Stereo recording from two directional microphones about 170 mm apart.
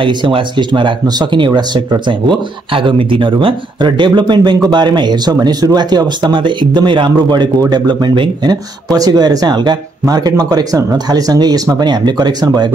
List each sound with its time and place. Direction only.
0.0 s speech: 30° right (ahead or behind)